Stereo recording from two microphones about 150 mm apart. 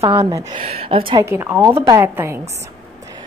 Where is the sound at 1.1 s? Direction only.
15° right (ahead or behind).